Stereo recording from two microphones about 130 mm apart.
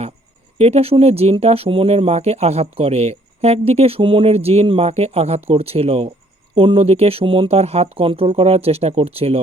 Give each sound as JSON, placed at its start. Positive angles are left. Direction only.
{"t": 0.6, "sound": "speech", "side_deg": -50}